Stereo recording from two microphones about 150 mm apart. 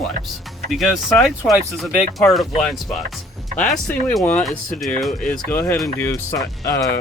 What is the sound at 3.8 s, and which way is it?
Speech, 15° left (ahead or behind).